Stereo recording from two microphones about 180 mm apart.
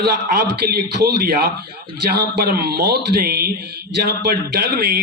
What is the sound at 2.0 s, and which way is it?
A man's voice, 65° right (ahead or behind).